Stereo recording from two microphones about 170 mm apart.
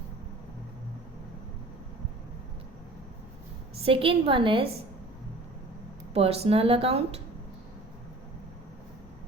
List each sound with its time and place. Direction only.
3.8 s speech: 35° right (ahead or behind)
6.1 s speech: 35° right (ahead or behind)